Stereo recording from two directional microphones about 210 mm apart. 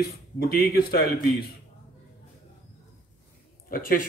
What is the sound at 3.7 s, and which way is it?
Speech, 40° left (ahead or behind).